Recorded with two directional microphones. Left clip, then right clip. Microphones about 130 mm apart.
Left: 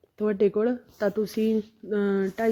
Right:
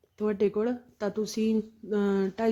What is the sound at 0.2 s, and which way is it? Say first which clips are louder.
Speech: left 4 dB; 35° left (ahead or behind).